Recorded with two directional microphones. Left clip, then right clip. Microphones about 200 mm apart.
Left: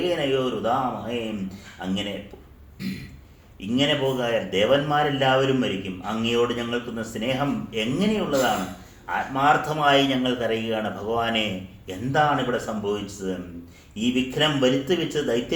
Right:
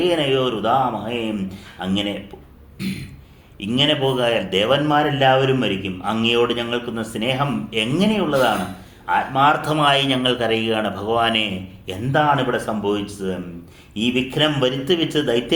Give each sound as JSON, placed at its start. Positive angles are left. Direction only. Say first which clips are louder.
{"t": 0.0, "sound": "a man's voice", "louder": "right 5 dB", "side_deg": -15}